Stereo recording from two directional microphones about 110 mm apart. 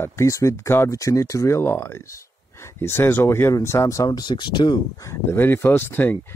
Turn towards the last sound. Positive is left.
turn(degrees=20)  # may be behind; listen again after turning